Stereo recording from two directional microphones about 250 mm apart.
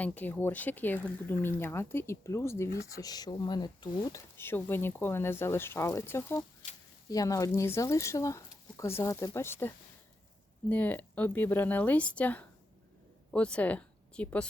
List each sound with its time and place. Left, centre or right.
0.0 s speech: centre